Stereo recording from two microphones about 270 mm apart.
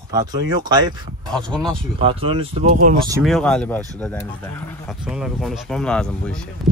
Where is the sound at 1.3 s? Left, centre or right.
Centre.